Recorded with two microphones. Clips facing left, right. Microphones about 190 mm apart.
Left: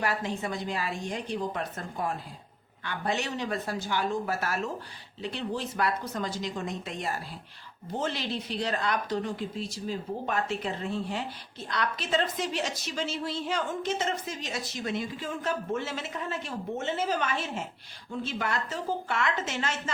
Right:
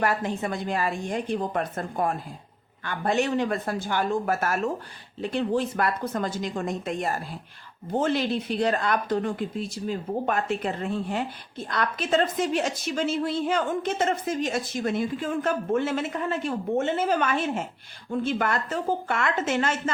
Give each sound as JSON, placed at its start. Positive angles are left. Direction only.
{"t": 0.0, "sound": "a woman's voice", "side_deg": -50}